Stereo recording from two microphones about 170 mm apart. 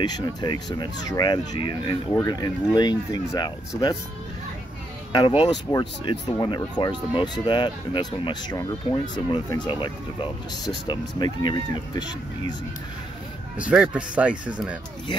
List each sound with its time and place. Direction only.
0.0 s speech: 25° left (ahead or behind)
5.1 s speech: 30° left (ahead or behind)
10.9 s speech: 25° left (ahead or behind)
13.6 s speech: 5° right (ahead or behind)